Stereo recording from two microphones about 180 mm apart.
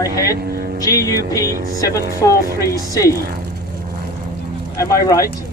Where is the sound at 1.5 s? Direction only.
50° right (ahead or behind).